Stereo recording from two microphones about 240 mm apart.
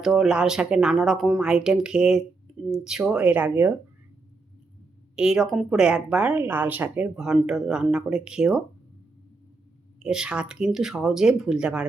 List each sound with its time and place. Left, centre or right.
0.0 s speech: centre
5.1 s speech: centre
10.0 s speech: centre